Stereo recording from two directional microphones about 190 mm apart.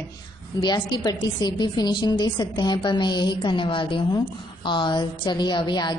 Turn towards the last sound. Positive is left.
turn(degrees=25)  # may be behind; listen again after turning